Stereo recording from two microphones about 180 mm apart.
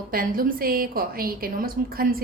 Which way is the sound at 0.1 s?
50° right (ahead or behind).